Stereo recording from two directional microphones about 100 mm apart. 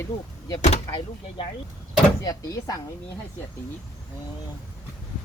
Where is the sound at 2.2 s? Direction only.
40° left (ahead or behind).